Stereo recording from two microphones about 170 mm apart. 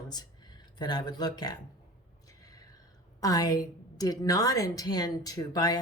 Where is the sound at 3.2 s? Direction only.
20° left (ahead or behind).